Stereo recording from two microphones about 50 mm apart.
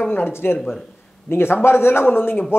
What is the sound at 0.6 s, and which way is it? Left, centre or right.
Speech, centre.